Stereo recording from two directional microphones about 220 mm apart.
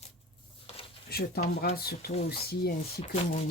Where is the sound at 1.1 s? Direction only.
45° left (ahead or behind).